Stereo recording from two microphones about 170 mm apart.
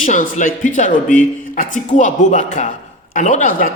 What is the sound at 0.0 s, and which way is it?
Speech, 50° left (ahead or behind).